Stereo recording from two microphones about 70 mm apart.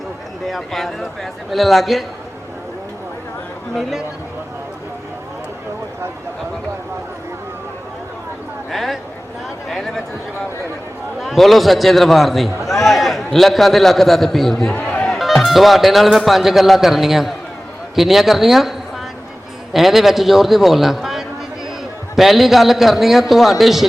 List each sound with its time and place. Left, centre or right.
0.4 s a man's voice: centre
3.8 s a man's voice: centre
8.7 s a man's voice: centre
11.2 s a man's voice: centre
14.8 s music: centre
15.0 s a man's voice: centre
19.7 s a man's voice: centre